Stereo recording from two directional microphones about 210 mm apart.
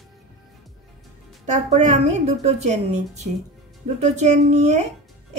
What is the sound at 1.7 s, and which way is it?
Speech, 30° right (ahead or behind).